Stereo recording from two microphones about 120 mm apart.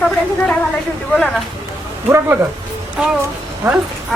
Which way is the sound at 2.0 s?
20° right (ahead or behind).